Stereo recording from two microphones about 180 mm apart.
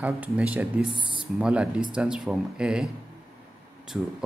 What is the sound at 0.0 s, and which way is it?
Speech, 10° right (ahead or behind).